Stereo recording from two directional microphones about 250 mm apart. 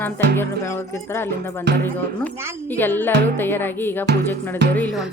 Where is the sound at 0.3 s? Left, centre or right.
Centre.